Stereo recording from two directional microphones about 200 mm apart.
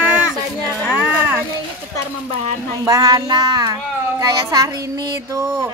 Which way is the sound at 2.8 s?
15° right (ahead or behind).